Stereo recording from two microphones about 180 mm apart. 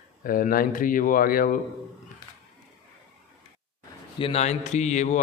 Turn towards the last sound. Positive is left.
turn(degrees=40)  # may be behind; listen again after turning